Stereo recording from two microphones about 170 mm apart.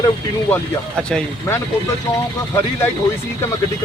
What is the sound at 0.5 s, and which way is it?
Speech, 5° left (ahead or behind).